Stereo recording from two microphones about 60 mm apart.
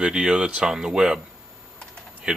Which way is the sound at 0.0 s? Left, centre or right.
Centre.